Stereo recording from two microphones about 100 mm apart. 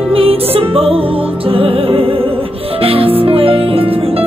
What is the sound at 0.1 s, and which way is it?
Music, 75° right (ahead or behind).